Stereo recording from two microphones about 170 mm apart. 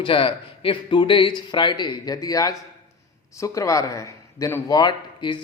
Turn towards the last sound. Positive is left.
turn(degrees=25)  # may be behind; listen again after turning